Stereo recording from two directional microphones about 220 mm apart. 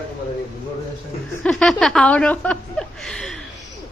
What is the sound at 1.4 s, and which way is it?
A woman's voice, centre (ahead or behind).